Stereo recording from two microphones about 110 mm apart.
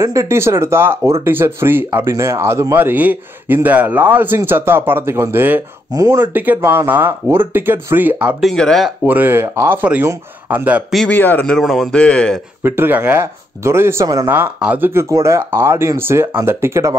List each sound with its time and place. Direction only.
0.0 s speech: 25° right (ahead or behind)
5.9 s speech: 35° right (ahead or behind)
6.3 s speech: 15° right (ahead or behind)
8.4 s speech: 5° left (ahead or behind)
9.0 s speech: 15° right (ahead or behind)
11.1 s speech: 15° left (ahead or behind)
11.4 s speech: 5° left (ahead or behind)
12.6 s speech: 20° right (ahead or behind)
14.3 s speech: 15° right (ahead or behind)